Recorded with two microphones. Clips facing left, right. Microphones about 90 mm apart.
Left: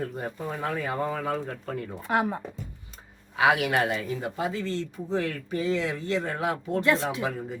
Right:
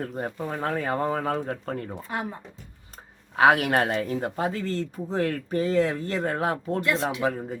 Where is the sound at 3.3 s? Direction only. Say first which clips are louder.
Right 3 dB; 45° right (ahead or behind).